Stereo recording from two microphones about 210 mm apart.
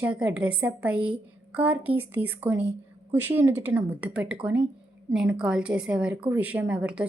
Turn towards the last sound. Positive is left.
turn(degrees=-5)  # may be behind; listen again after turning